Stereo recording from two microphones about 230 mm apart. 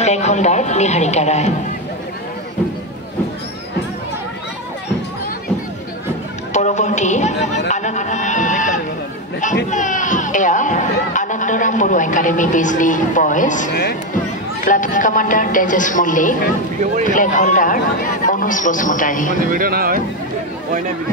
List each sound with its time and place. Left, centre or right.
0.0 s speech: left
6.5 s music: left
9.4 s a child's voice: left
19.5 s speech: right